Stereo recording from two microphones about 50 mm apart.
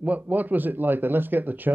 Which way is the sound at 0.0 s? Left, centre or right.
Right.